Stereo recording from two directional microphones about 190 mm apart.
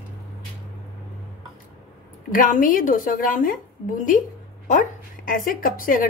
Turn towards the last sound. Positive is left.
turn(degrees=45)  # may be behind; listen again after turning